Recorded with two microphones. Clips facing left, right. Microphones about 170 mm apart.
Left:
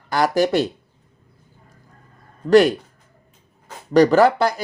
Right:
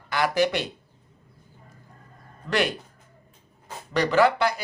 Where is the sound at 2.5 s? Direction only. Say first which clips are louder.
Left 12 dB; 40° left (ahead or behind).